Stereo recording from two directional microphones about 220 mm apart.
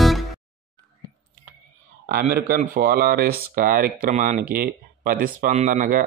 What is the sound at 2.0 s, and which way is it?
Speech, 40° right (ahead or behind).